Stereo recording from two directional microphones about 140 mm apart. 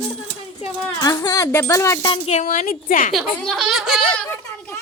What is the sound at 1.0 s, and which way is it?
Speech, 25° left (ahead or behind).